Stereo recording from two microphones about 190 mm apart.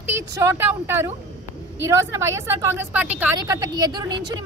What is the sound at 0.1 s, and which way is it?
A woman's voice, 15° right (ahead or behind).